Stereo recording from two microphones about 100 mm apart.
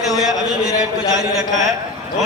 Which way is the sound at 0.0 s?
5° right (ahead or behind).